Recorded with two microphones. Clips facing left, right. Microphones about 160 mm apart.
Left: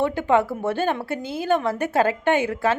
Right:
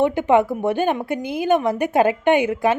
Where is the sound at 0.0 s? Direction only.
20° right (ahead or behind).